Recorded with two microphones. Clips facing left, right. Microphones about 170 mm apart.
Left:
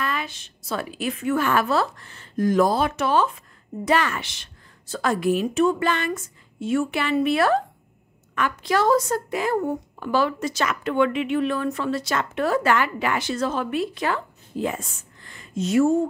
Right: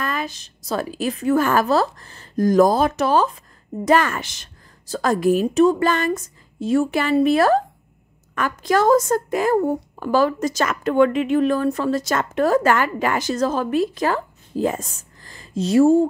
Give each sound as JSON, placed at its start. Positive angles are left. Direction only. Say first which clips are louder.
{"t": 0.0, "sound": "a woman's voice", "louder": "right 2 dB", "side_deg": -40}